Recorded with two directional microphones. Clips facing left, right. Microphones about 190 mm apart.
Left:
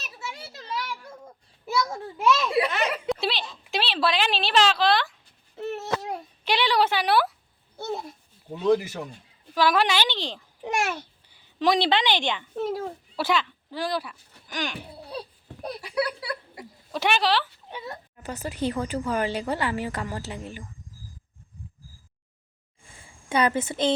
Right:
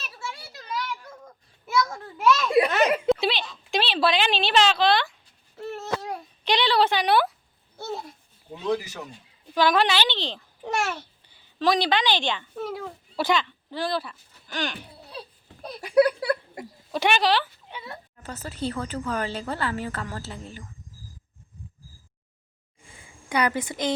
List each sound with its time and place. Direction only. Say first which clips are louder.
0.0 s children playing: even; 20° left (ahead or behind)
2.6 s speech: right 4 dB; 45° right (ahead or behind)
3.1 s a sound: right 5 dB; centre (ahead or behind)
3.7 s speech: right 2 dB; centre (ahead or behind)
5.5 s a sound: left 1 dB; 20° left (ahead or behind)
6.4 s a woman's voice: right 1 dB; 10° left (ahead or behind)
8.6 s speech: left 5 dB; 55° left (ahead or behind)
9.6 s a woman's voice: right 1 dB; 5° left (ahead or behind); by 12.9 s 25° left (ahead or behind)
13.1 s speech: right 1 dB; 5° left (ahead or behind)
15.8 s a sound: right 10 dB; 50° right (ahead or behind)
16.9 s speech: right 1 dB; centre (ahead or behind)
17.7 s speech: left 3 dB; 40° left (ahead or behind)
18.2 s speech: left 3 dB; 10° left (ahead or behind)
23.3 s a woman's voice: left 2 dB; 25° left (ahead or behind)